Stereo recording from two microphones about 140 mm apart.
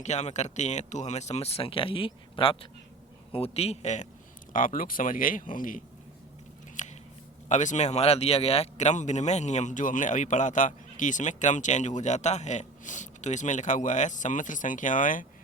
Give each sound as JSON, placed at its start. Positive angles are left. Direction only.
{"t": 0.0, "sound": "speech", "side_deg": 55}
{"t": 4.5, "sound": "speech", "side_deg": 75}
{"t": 6.8, "sound": "scissors", "side_deg": 60}
{"t": 7.4, "sound": "speech", "side_deg": 60}